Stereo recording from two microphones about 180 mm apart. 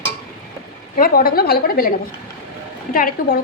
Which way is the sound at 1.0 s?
55° left (ahead or behind).